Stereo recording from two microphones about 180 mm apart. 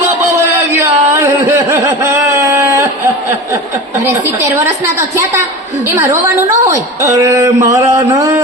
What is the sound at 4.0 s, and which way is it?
A woman's voice, 15° right (ahead or behind).